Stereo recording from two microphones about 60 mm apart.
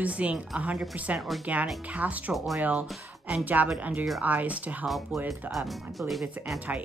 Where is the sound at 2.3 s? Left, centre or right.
Centre.